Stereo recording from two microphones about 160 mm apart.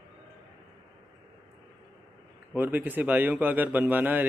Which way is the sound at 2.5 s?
10° right (ahead or behind).